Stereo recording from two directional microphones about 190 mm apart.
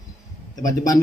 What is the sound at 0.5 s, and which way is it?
Speech, 20° left (ahead or behind).